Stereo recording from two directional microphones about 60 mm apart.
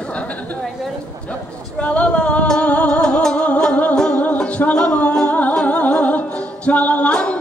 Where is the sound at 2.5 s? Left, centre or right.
Centre.